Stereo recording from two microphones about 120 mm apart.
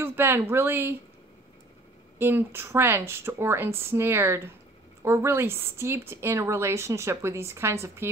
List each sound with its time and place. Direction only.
0.0 s a woman's voice: 20° right (ahead or behind)
2.1 s a woman's voice: 20° right (ahead or behind)